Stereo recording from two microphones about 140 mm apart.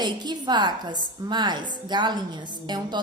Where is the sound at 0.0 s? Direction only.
30° right (ahead or behind).